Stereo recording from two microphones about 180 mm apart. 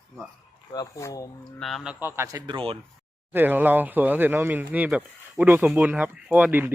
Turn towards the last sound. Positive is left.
turn(degrees=-10)  # may be behind; listen again after turning